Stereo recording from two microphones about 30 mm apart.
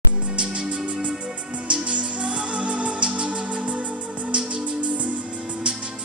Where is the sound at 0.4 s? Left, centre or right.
Right.